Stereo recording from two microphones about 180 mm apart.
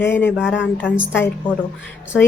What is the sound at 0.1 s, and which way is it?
Speech, 10° left (ahead or behind).